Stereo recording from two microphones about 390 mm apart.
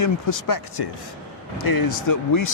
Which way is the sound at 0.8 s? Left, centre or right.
Left.